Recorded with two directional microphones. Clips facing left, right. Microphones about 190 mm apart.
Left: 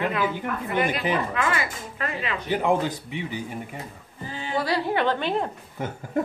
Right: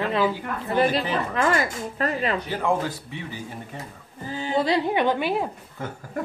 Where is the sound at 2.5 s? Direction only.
20° left (ahead or behind).